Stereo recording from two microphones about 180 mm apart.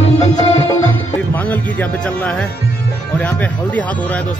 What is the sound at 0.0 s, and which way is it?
Music, 35° left (ahead or behind).